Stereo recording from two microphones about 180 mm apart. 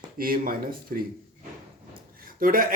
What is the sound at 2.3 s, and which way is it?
Speech, 50° right (ahead or behind).